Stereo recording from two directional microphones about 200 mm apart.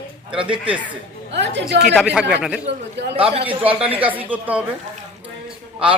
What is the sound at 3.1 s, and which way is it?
Speech, 30° right (ahead or behind).